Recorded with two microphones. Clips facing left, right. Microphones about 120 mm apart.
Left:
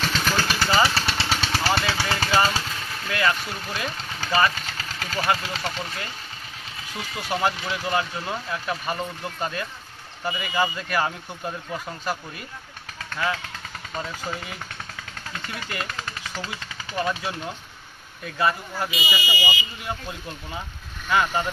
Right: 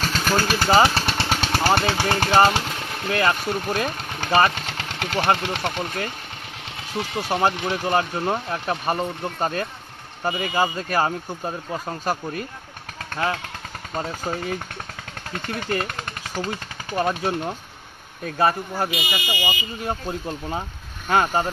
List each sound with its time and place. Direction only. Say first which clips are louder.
0.0 s vehicle: right 3 dB; 45° right (ahead or behind)
0.7 s speech: right 5 dB; 45° right (ahead or behind)
1.0 s vehicle: right 2 dB; 50° right (ahead or behind)
2.3 s speech: right 5 dB; 60° right (ahead or behind)
2.8 s a sound: right 4 dB; 55° right (ahead or behind)
3.3 s speech: right 4 dB; 50° right (ahead or behind)
7.2 s speech: right 3 dB; 50° right (ahead or behind)
15.3 s speech: right 7 dB; 55° right (ahead or behind)